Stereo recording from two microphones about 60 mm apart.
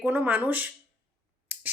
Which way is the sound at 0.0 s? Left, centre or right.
Right.